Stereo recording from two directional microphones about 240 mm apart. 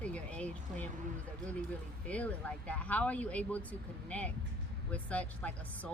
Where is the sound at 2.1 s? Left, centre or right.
Centre.